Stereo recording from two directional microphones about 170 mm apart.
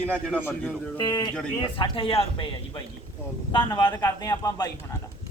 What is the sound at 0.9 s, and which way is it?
Speech, 25° left (ahead or behind).